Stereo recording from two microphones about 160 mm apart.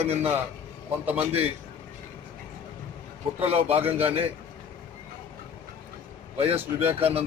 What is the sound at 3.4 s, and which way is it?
Speech, 40° right (ahead or behind).